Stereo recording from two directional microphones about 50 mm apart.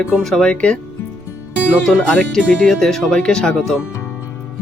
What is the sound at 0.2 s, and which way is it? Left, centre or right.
Speech, centre.